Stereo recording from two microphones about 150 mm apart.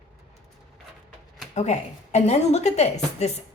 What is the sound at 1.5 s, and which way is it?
A woman's voice, 50° left (ahead or behind).